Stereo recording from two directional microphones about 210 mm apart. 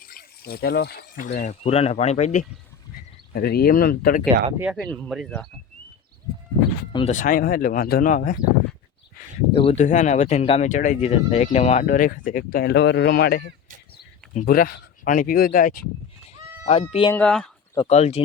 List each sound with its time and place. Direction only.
0.0 s speech: 45° left (ahead or behind)
3.3 s speech: 45° left (ahead or behind)
4.5 s speech: 5° right (ahead or behind)
4.8 s speech: 5° left (ahead or behind)
6.9 s speech: 35° left (ahead or behind)
9.5 s speech: 25° left (ahead or behind); by 15.8 s 40° left (ahead or behind)
16.6 s speech: 30° left (ahead or behind)
17.1 s speech: 5° left (ahead or behind)
17.7 s speech: 30° left (ahead or behind)